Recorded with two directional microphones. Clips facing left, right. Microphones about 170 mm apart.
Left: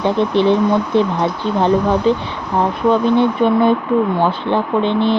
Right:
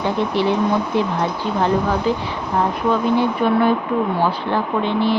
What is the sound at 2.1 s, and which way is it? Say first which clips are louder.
Speech: left 7 dB; 25° left (ahead or behind).